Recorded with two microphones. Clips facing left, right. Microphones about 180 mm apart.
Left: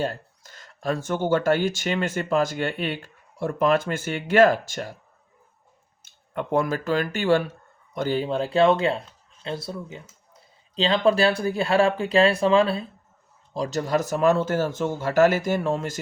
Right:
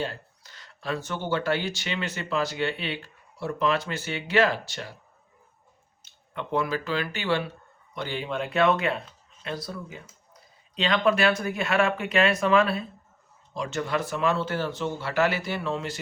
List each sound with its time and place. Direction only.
0.0 s speech: 45° left (ahead or behind)
6.0 s speech: 45° left (ahead or behind)